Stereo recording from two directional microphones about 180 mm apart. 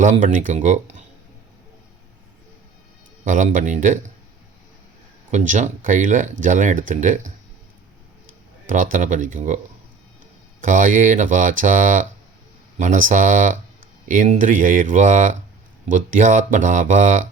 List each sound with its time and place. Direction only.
0.0 s speech: 45° right (ahead or behind)
3.2 s speech: 45° right (ahead or behind)
5.3 s speech: 45° right (ahead or behind)
8.6 s speech: 45° right (ahead or behind)
10.6 s speech: 45° right (ahead or behind)